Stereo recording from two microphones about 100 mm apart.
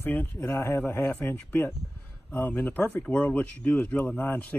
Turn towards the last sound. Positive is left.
turn(degrees=20)  # may be behind; listen again after turning